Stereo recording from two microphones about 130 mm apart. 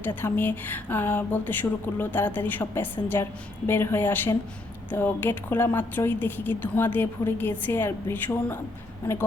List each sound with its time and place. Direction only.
0.0 s a woman's voice: 15° left (ahead or behind)